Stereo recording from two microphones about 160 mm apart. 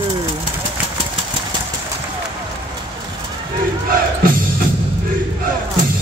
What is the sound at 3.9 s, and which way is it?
Music, 65° right (ahead or behind).